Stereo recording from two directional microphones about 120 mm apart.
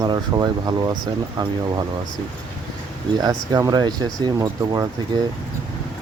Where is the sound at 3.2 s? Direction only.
30° right (ahead or behind).